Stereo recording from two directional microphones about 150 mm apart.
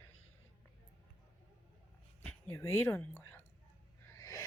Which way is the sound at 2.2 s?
15° left (ahead or behind).